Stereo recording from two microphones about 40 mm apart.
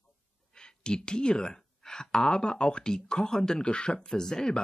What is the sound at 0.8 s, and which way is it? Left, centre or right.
Speech, left.